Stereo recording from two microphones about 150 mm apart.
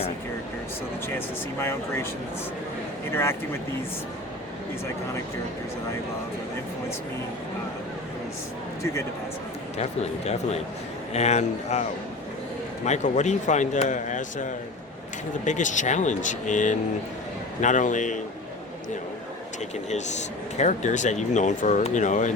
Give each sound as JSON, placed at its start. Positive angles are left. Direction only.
{"t": 1.0, "sound": "speech", "side_deg": 15}
{"t": 3.1, "sound": "speech", "side_deg": 15}
{"t": 9.7, "sound": "speech", "side_deg": 45}
{"t": 15.4, "sound": "speech", "side_deg": 55}
{"t": 19.9, "sound": "speech", "side_deg": 50}